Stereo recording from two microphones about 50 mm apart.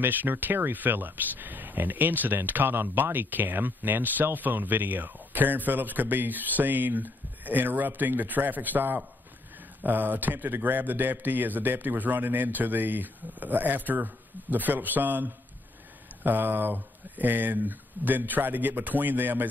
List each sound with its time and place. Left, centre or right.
0.0 s speech: right